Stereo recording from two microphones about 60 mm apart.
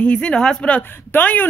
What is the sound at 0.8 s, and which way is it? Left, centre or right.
Speech, left.